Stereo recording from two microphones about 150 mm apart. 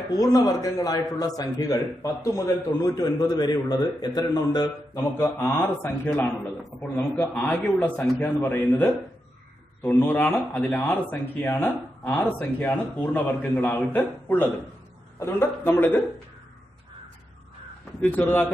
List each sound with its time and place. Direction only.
0.1 s a man's voice: 25° left (ahead or behind)
18.0 s speech: 10° left (ahead or behind)